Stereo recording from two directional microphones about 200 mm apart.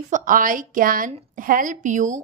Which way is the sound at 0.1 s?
40° right (ahead or behind).